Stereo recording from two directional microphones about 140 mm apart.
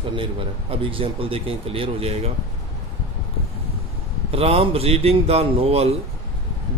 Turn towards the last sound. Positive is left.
turn(degrees=-45)  # may be behind; listen again after turning